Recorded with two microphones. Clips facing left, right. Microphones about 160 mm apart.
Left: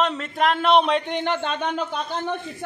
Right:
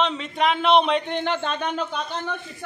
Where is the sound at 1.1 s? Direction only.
10° left (ahead or behind).